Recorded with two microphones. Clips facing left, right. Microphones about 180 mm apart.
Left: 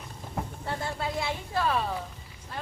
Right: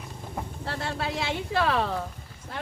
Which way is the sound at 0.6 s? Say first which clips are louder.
Right 2 dB; 75° right (ahead or behind).